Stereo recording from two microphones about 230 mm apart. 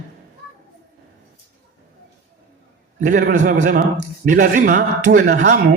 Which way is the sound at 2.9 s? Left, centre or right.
Right.